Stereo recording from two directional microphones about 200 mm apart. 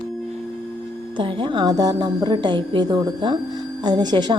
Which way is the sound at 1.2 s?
25° right (ahead or behind).